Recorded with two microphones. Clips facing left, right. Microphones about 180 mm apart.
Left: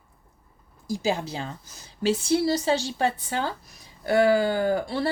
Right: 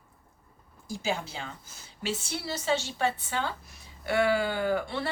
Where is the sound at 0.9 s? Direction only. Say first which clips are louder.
Left 6 dB; 35° left (ahead or behind).